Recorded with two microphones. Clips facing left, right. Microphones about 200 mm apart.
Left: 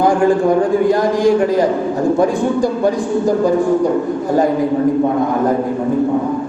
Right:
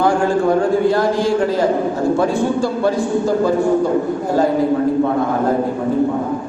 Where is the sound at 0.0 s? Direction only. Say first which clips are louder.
Left 3 dB; 15° left (ahead or behind).